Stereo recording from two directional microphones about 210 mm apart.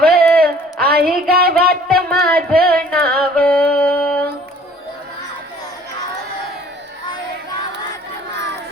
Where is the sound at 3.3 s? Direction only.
5° left (ahead or behind).